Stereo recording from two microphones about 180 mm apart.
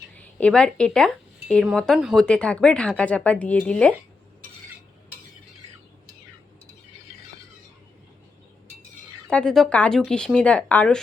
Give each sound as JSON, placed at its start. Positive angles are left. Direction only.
{"t": 0.2, "sound": "speech", "side_deg": 5}
{"t": 9.2, "sound": "speech", "side_deg": 5}